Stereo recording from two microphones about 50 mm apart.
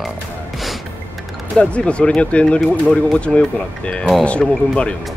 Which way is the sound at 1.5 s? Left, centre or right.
Left.